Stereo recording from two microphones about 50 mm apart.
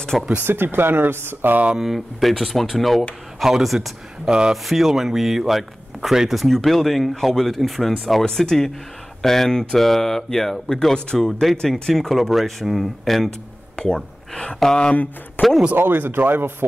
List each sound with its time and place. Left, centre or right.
0.4 s speech: right
1.8 s speech: centre
4.3 s speech: centre
4.6 s speech: centre
13.8 s gasp: centre
14.3 s speech: centre
15.4 s speech: left
15.7 s speech: right